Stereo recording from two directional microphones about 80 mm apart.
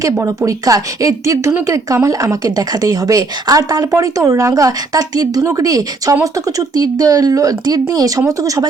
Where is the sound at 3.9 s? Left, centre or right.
Right.